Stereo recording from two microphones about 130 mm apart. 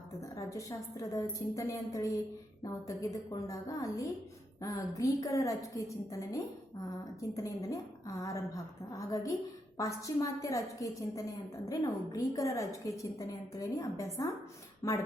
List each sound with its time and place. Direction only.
0.2 s a woman's voice: 25° left (ahead or behind)